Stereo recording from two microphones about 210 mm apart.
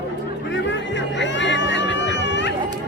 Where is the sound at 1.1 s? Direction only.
60° left (ahead or behind).